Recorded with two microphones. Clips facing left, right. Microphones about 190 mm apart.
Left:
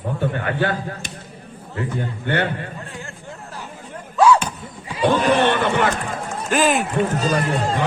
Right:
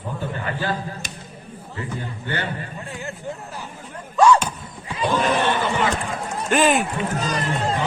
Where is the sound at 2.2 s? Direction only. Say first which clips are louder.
Left 7 dB; 60° left (ahead or behind).